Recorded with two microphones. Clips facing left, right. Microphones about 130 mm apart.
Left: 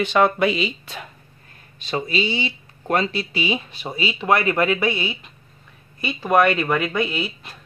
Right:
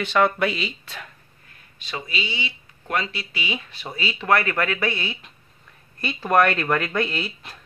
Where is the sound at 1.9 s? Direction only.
35° left (ahead or behind).